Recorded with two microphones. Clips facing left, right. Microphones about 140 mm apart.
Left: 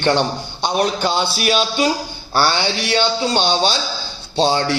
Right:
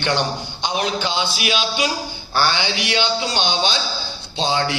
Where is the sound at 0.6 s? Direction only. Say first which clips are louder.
Left 4 dB; 45° left (ahead or behind).